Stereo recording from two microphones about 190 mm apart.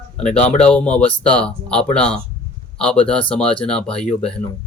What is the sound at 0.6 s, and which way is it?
Speech, 5° left (ahead or behind).